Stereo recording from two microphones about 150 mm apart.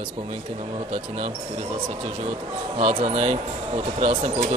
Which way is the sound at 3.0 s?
40° right (ahead or behind).